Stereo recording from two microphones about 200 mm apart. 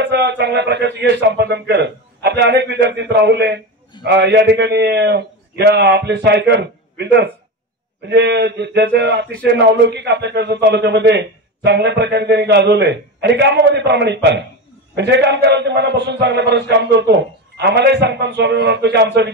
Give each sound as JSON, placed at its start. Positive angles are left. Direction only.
{"t": 0.0, "sound": "speech", "side_deg": -60}